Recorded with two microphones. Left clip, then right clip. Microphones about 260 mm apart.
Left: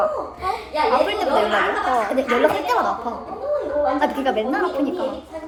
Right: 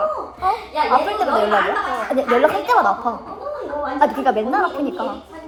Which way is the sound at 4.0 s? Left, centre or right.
Right.